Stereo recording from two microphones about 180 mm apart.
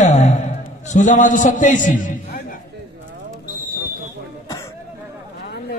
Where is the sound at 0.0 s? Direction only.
40° left (ahead or behind).